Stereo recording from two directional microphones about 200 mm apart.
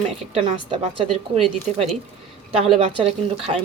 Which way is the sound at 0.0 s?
30° right (ahead or behind).